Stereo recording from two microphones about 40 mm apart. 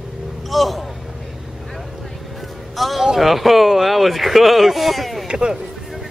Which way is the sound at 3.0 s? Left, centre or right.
Centre.